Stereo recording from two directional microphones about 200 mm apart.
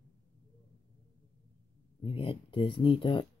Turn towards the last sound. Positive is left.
turn(degrees=25)  # may be behind; listen again after turning